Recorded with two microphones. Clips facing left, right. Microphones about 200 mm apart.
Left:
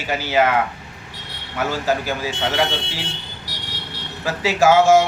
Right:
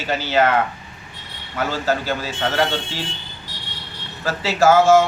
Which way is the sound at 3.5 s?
75° left (ahead or behind).